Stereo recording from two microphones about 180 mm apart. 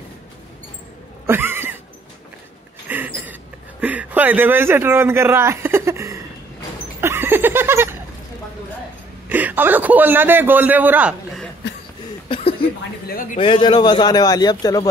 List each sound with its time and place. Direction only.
1.2 s neigh: 10° right (ahead or behind)
2.9 s a sound: 10° right (ahead or behind)
3.8 s speech: 10° right (ahead or behind)
7.0 s a sound: 15° right (ahead or behind)
9.3 s a man's voice: 10° right (ahead or behind)
13.4 s a man's voice: 30° left (ahead or behind)